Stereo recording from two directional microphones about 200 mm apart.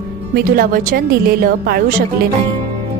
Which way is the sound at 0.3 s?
50° right (ahead or behind).